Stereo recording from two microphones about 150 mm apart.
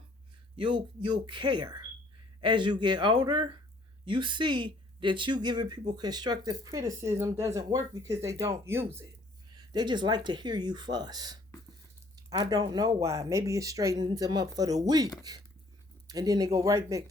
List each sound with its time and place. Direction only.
0.5 s speech: 30° right (ahead or behind); by 9.0 s 15° right (ahead or behind)
9.6 s speech: 30° right (ahead or behind)